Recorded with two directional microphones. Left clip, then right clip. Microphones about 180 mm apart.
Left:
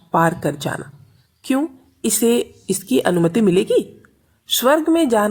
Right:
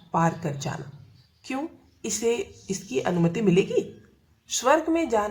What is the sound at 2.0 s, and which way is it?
Speech, 35° left (ahead or behind).